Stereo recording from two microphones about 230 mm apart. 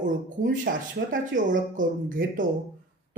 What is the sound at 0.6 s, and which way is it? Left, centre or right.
Speech, right.